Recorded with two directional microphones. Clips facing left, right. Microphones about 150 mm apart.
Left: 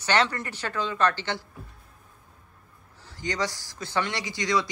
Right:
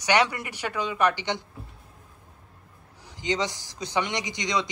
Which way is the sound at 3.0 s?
20° right (ahead or behind).